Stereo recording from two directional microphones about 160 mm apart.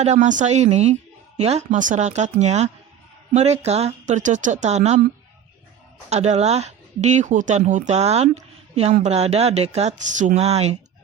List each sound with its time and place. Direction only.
0.0 s speech: 45° right (ahead or behind)
6.1 s speech: 45° right (ahead or behind)